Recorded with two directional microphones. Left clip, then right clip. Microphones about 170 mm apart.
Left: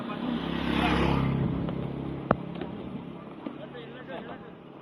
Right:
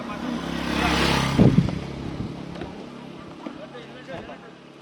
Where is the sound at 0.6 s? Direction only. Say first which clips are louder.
Right 4 dB; 40° right (ahead or behind).